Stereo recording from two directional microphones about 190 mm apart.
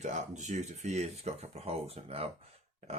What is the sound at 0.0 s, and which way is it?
Speech, 40° right (ahead or behind).